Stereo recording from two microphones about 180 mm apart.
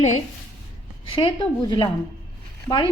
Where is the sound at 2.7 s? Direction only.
10° left (ahead or behind).